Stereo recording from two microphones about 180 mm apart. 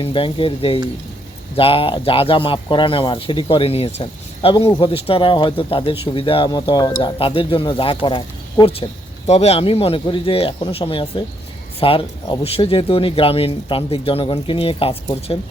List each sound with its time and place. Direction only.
0.0 s speech: 30° left (ahead or behind)